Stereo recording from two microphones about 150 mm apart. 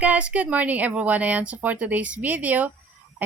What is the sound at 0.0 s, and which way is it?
A woman's voice, 10° right (ahead or behind).